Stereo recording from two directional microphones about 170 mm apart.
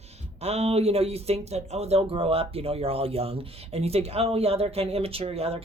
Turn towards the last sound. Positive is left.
turn(degrees=-35)  # may be behind; listen again after turning